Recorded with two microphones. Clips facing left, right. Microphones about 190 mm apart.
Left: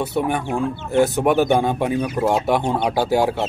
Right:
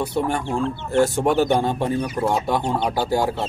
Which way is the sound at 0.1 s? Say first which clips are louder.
Left 1 dB; 15° left (ahead or behind).